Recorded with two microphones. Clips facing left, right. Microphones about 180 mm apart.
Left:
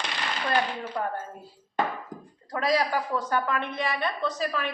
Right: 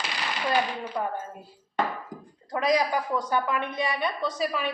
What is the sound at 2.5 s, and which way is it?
A woman's voice, 20° right (ahead or behind).